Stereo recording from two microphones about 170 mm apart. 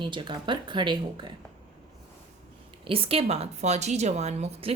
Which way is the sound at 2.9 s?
35° right (ahead or behind).